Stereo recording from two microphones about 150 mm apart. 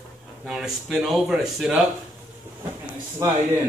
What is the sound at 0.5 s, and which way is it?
Speech, centre (ahead or behind).